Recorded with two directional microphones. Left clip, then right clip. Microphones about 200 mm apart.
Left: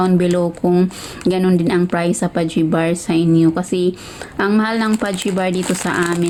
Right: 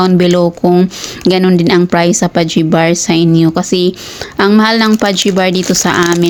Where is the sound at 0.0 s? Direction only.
40° right (ahead or behind).